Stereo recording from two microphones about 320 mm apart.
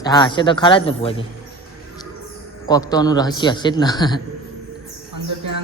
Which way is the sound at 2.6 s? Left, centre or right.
Centre.